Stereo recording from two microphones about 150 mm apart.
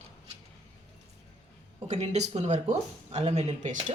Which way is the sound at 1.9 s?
50° right (ahead or behind).